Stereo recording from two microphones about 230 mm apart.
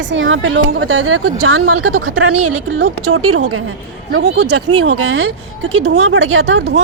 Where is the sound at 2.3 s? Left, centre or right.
Right.